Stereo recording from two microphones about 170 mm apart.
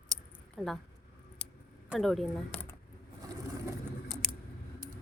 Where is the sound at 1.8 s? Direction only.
Centre (ahead or behind).